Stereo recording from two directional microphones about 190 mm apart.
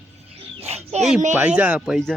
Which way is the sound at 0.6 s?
35° right (ahead or behind).